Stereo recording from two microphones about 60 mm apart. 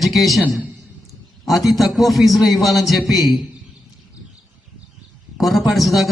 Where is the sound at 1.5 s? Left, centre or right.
Centre.